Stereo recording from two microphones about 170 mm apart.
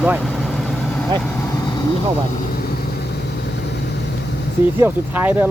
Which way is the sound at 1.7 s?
25° left (ahead or behind).